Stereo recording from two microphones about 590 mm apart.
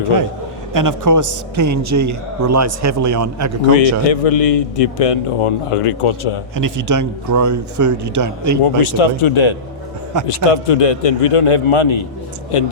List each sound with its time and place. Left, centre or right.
0.7 s a man's voice: right
3.8 s a man's voice: left
6.6 s a man's voice: right
8.6 s a man's voice: left